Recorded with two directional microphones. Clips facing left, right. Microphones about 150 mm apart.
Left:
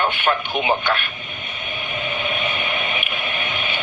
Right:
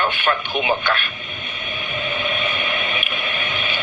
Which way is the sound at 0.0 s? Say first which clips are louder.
Left 1 dB; 20° left (ahead or behind).